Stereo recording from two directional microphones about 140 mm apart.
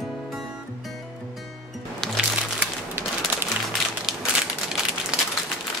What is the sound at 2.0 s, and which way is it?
Music, 5° left (ahead or behind).